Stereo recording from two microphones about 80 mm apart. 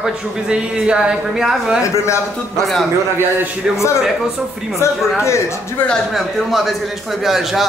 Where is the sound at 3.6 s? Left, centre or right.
Centre.